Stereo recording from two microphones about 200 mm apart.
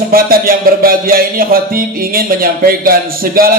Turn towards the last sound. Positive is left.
turn(degrees=-45)  # may be behind; listen again after turning